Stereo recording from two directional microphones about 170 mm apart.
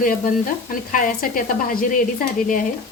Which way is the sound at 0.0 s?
55° left (ahead or behind).